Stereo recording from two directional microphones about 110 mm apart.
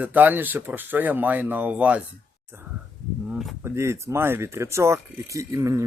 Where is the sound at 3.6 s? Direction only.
25° right (ahead or behind).